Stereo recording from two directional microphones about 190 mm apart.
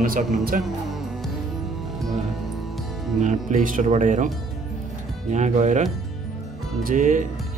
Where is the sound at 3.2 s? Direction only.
45° right (ahead or behind).